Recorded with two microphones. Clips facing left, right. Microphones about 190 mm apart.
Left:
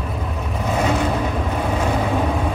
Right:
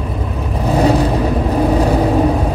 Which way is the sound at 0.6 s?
35° right (ahead or behind).